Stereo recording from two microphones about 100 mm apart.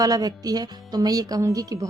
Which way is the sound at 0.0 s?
40° right (ahead or behind).